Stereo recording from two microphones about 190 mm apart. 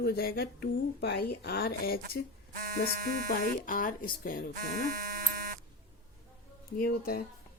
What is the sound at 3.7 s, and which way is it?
Speech, 45° left (ahead or behind).